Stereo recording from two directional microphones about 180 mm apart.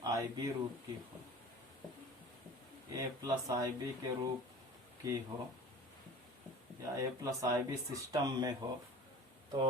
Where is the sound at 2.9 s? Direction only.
20° right (ahead or behind).